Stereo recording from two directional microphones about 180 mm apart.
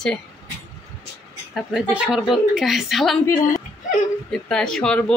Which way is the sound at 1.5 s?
Centre (ahead or behind).